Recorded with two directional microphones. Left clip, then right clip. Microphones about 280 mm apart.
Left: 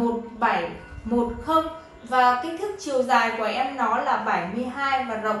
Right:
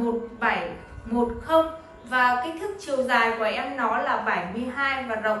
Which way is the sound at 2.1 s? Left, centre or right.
Centre.